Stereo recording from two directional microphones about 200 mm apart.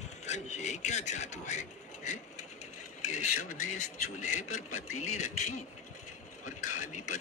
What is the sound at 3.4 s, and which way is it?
A man's voice, 90° left.